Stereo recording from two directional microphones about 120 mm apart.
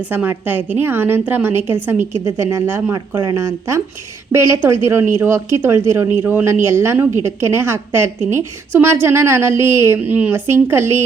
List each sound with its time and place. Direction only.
0.0 s a woman's voice: 15° right (ahead or behind)
3.2 s a woman's voice: 30° right (ahead or behind)